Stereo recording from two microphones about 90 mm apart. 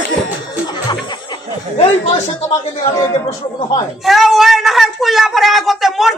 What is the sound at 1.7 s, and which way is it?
Speech, 90° left.